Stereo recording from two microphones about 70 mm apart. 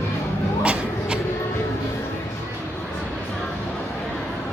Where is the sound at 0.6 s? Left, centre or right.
Centre.